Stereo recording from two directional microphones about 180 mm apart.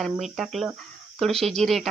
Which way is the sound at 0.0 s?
Centre (ahead or behind).